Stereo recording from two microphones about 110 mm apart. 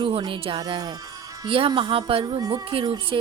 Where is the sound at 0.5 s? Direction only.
40° right (ahead or behind).